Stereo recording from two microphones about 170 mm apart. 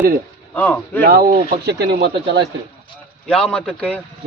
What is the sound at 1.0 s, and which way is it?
Speech, 60° right (ahead or behind).